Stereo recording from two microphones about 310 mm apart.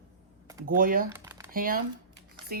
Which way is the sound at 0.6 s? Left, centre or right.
Right.